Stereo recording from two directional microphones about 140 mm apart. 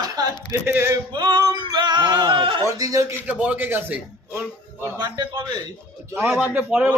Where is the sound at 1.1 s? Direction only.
35° right (ahead or behind).